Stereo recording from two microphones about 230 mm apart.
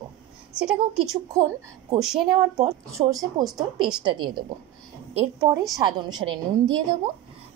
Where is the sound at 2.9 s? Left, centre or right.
Centre.